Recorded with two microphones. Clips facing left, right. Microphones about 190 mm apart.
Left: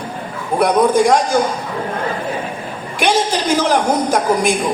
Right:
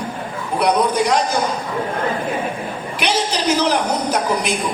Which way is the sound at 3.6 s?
45° left (ahead or behind).